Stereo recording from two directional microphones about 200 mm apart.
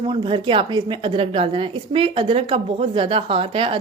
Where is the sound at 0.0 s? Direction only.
25° right (ahead or behind).